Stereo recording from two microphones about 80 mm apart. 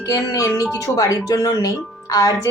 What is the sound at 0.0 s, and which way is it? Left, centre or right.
Speech, left.